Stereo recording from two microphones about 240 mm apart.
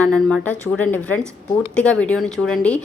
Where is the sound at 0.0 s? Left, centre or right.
Centre.